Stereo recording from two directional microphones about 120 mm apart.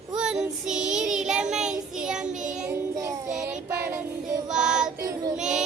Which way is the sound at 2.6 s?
25° right (ahead or behind).